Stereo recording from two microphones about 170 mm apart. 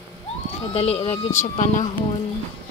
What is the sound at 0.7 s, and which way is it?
Speech, 35° left (ahead or behind).